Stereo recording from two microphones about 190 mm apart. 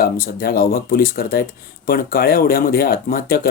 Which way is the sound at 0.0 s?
50° left (ahead or behind).